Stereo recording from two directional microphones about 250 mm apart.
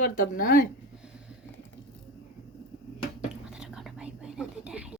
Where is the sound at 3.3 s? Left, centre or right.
Centre.